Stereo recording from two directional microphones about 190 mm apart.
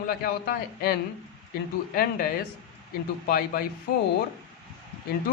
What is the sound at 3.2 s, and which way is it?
Speech, 50° left (ahead or behind).